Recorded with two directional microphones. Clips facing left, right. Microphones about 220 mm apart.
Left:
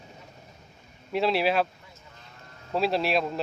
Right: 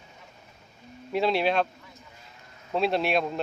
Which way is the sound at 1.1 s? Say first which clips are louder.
Even; centre (ahead or behind).